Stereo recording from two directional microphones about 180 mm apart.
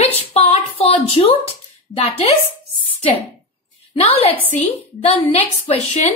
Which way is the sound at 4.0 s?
35° left (ahead or behind).